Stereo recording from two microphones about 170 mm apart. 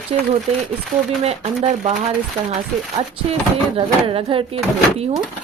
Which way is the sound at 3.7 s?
35° right (ahead or behind).